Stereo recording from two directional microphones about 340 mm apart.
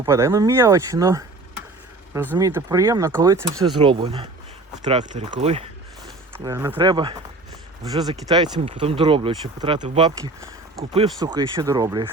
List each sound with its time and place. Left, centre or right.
0.0 s speech: centre
2.3 s speech: centre